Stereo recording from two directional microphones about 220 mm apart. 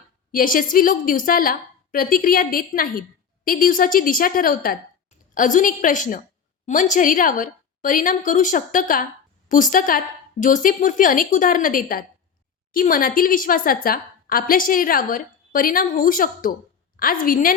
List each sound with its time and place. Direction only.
0.3 s a woman's voice: 40° left (ahead or behind)